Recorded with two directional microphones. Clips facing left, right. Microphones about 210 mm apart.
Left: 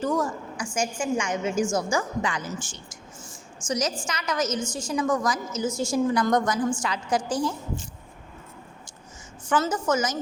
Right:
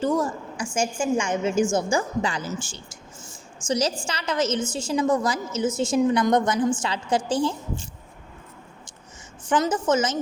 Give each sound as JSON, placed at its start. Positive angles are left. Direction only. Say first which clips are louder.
{"t": 0.0, "sound": "a woman's voice", "louder": "right 2 dB", "side_deg": -25}
{"t": 9.5, "sound": "a woman's voice", "louder": "right 2 dB", "side_deg": -20}